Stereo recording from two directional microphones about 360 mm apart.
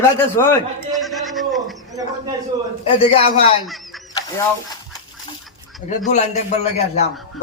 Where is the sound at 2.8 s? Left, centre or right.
Centre.